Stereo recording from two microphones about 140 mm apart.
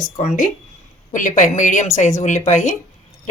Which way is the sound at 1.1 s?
65° left (ahead or behind).